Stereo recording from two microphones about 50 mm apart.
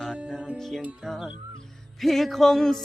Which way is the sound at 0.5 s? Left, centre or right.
Centre.